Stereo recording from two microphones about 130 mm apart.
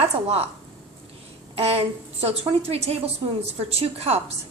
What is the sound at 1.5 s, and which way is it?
A woman's voice, 50° right (ahead or behind).